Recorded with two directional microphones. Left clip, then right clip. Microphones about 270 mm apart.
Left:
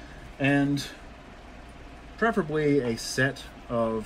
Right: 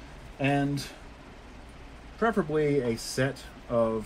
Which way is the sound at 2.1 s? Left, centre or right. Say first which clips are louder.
Left 1 dB; centre.